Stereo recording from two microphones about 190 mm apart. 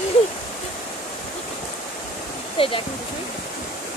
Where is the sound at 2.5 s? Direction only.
30° left (ahead or behind).